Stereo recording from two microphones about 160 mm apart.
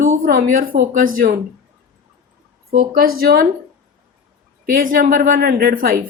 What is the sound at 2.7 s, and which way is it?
Speech, 70° right (ahead or behind).